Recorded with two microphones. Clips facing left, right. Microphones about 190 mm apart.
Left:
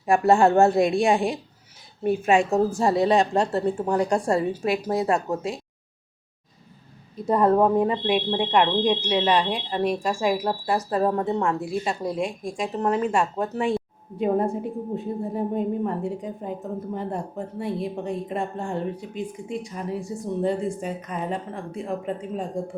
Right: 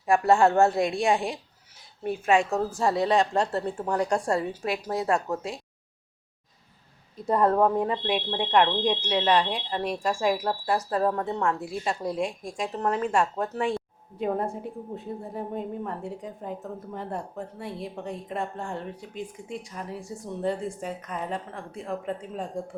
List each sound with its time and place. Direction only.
0.0 s a woman's voice: 20° left (ahead or behind)
7.3 s a woman's voice: 15° left (ahead or behind)
20.4 s speech: 10° left (ahead or behind)